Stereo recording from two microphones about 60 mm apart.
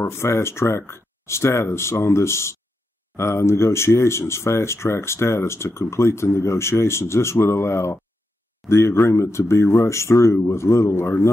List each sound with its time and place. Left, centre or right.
0.0 s speech: left